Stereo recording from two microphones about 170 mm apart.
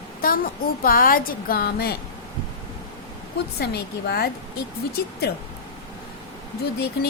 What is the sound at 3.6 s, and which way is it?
A woman's voice, 70° left (ahead or behind).